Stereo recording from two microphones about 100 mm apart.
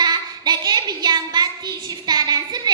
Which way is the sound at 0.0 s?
45° right (ahead or behind).